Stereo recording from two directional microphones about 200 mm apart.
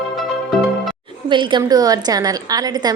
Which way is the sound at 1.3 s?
25° right (ahead or behind).